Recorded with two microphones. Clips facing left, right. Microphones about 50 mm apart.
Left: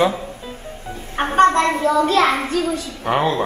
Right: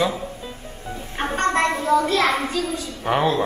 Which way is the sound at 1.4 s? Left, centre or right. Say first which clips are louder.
Left 7 dB; left.